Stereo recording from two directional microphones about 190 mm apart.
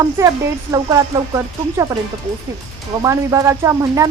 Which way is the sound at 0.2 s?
15° right (ahead or behind).